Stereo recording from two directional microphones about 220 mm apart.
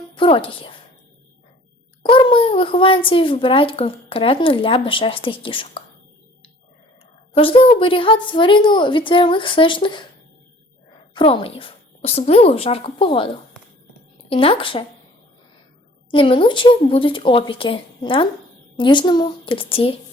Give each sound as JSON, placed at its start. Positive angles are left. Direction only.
{"t": 0.1, "sound": "a woman's voice", "side_deg": 25}
{"t": 2.0, "sound": "a child's voice", "side_deg": 25}
{"t": 7.3, "sound": "a child's voice", "side_deg": 25}
{"t": 11.1, "sound": "a child's voice", "side_deg": 25}
{"t": 16.1, "sound": "a child's voice", "side_deg": 25}